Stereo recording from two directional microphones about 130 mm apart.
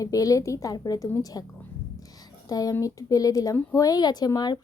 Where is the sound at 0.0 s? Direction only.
25° left (ahead or behind).